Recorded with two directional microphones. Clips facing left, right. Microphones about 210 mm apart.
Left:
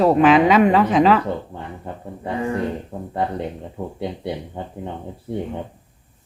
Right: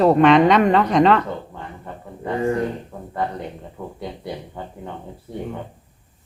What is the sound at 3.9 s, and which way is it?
Speech, 25° left (ahead or behind).